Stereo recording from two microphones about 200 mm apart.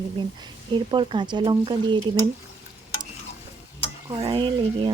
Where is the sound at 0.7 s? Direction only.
25° right (ahead or behind).